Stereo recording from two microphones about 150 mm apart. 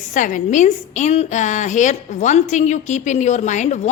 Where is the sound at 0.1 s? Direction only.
60° left (ahead or behind).